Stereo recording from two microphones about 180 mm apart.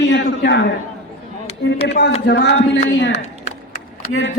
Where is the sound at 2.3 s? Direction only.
90° left.